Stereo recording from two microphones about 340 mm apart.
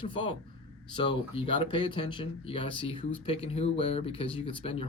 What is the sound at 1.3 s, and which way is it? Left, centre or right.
Speech, centre.